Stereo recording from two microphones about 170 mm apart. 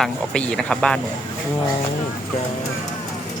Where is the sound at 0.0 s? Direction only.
5° left (ahead or behind).